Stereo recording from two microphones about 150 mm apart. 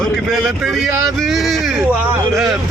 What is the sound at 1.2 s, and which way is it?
Speech, centre (ahead or behind).